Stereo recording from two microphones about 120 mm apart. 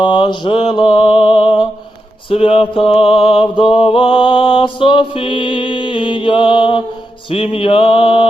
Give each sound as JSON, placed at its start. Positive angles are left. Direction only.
{"t": 0.0, "sound": "music", "side_deg": 40}